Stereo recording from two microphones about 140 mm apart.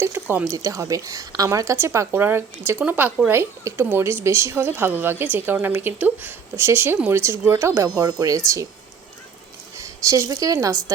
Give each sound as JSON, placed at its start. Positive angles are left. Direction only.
{"t": 0.0, "sound": "speech", "side_deg": -15}
{"t": 9.7, "sound": "a woman's voice", "side_deg": -20}